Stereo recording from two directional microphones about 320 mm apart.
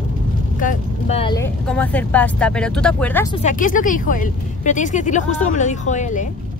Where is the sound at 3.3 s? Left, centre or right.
Left.